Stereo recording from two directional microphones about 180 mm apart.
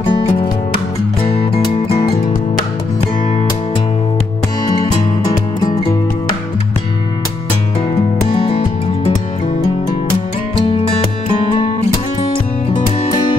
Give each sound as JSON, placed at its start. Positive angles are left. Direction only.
{"t": 0.0, "sound": "music", "side_deg": 30}
{"t": 8.3, "sound": "music", "side_deg": 30}
{"t": 10.5, "sound": "music", "side_deg": 30}